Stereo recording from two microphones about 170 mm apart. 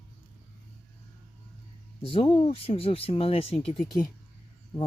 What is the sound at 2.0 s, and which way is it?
Speech, 30° left (ahead or behind).